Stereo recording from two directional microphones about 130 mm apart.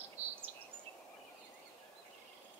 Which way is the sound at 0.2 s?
55° right (ahead or behind).